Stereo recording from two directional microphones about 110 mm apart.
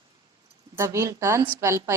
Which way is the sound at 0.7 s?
25° right (ahead or behind).